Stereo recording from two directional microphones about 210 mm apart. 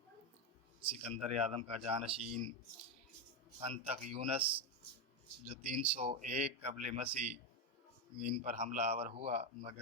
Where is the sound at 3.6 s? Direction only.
30° right (ahead or behind).